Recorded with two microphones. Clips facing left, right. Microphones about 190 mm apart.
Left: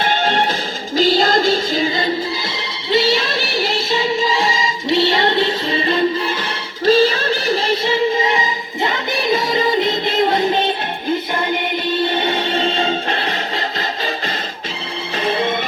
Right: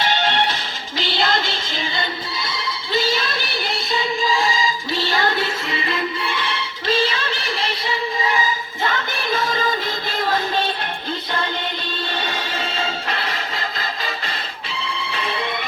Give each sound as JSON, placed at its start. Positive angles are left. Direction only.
{"t": 0.0, "sound": "music", "side_deg": 45}
{"t": 2.6, "sound": "music", "side_deg": 25}
{"t": 11.9, "sound": "music", "side_deg": 20}
{"t": 15.1, "sound": "music", "side_deg": 35}